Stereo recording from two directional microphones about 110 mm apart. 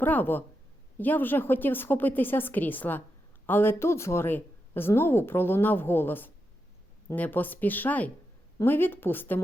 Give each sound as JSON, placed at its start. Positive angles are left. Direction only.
{"t": 0.0, "sound": "a woman's voice", "side_deg": 15}